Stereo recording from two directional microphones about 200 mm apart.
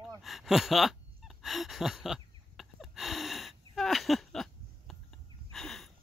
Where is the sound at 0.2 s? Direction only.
Centre (ahead or behind).